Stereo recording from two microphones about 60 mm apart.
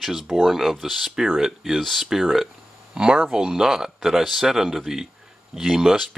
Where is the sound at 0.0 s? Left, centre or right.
Centre.